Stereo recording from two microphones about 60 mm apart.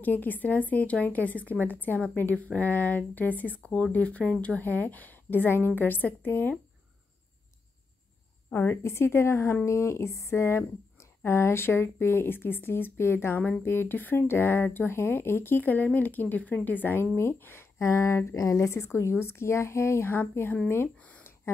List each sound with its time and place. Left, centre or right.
0.0 s speech: left
3.6 s speech: centre
4.6 s speech: left
8.5 s a woman's voice: left
8.8 s speech: left
13.4 s speech: left
17.7 s speech: left